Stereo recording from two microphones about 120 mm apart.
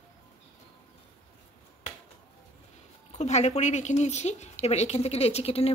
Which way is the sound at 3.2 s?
70° left (ahead or behind).